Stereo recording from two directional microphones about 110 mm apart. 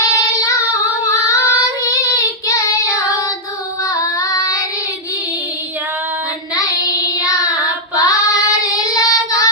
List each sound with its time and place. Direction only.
0.0 s child singing: 30° left (ahead or behind)
7.2 s child singing: 35° left (ahead or behind)